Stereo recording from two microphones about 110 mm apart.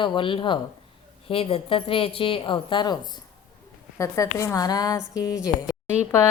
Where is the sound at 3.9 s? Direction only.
30° left (ahead or behind).